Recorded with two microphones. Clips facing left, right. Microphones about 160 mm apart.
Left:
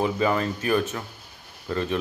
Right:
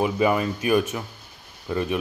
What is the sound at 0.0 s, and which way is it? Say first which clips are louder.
Speech: right 2 dB; 15° right (ahead or behind).